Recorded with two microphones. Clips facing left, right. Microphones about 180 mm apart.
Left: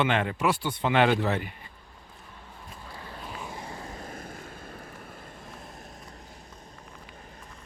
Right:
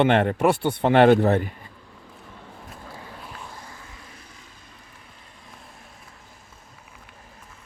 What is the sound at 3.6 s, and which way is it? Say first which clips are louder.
Vehicle: left 6 dB; 35° left (ahead or behind).